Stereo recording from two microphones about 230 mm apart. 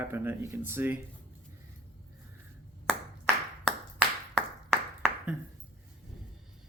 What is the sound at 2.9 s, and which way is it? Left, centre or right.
Clapping, centre.